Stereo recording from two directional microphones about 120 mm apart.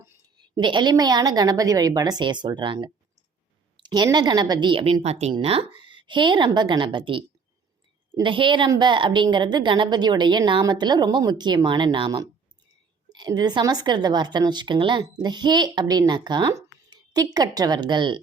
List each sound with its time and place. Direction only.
0.5 s a woman's voice: 40° right (ahead or behind); by 5.3 s 60° right (ahead or behind)
5.3 s a woman's voice: 50° right (ahead or behind)